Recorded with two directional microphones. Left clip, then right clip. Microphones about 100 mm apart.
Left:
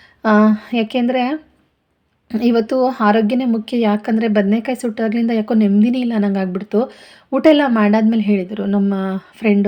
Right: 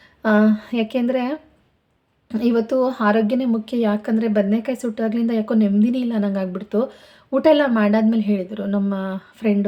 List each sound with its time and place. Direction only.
0.2 s speech: 35° left (ahead or behind)